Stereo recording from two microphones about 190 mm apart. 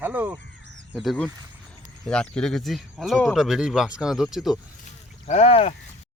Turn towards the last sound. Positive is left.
turn(degrees=30)  # may be behind; listen again after turning